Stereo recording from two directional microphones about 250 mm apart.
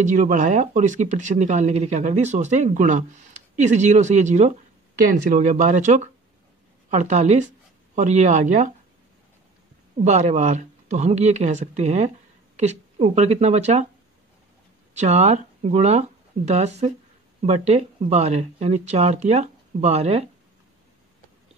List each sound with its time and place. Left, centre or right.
0.0 s speech: right
9.9 s speech: right
15.0 s speech: right